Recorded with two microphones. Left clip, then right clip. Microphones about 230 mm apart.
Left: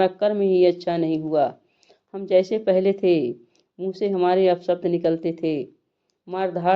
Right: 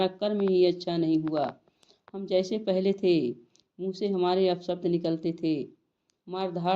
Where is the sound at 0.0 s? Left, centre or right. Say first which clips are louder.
Left 7 dB; left.